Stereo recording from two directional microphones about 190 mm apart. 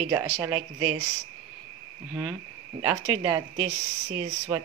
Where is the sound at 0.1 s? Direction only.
15° right (ahead or behind).